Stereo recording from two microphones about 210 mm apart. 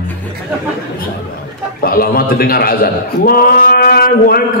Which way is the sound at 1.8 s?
45° left (ahead or behind).